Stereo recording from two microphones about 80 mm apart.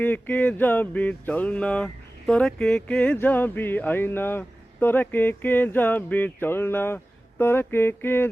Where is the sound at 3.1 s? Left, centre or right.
Left.